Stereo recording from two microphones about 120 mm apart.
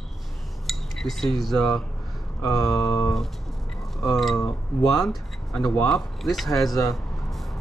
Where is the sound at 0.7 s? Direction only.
Centre (ahead or behind).